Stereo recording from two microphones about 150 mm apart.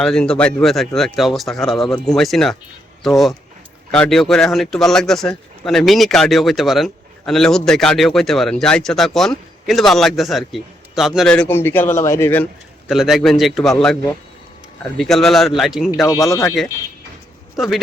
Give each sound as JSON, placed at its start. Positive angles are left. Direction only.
{"t": 0.0, "sound": "speech", "side_deg": 5}
{"t": 12.9, "sound": "speech", "side_deg": 0}
{"t": 16.0, "sound": "speech", "side_deg": 20}